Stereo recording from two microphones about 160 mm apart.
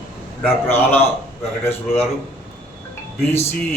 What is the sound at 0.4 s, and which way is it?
Speech, 10° left (ahead or behind).